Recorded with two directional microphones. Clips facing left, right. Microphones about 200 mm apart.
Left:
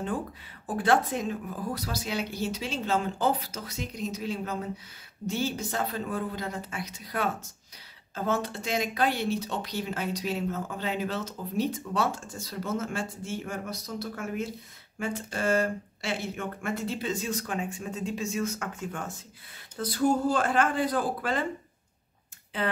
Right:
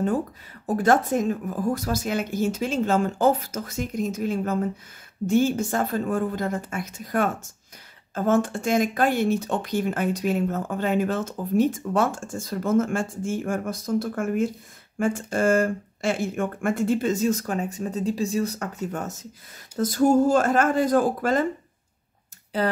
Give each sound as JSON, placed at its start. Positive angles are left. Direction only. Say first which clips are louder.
{"t": 0.7, "sound": "speech", "louder": "right 5 dB", "side_deg": -40}
{"t": 22.5, "sound": "speech", "louder": "right 6 dB", "side_deg": -40}